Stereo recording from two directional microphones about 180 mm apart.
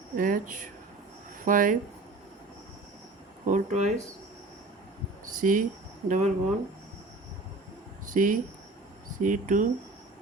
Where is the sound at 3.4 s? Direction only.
45° right (ahead or behind).